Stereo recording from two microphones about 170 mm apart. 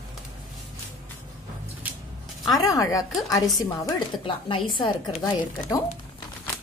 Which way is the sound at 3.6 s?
20° left (ahead or behind).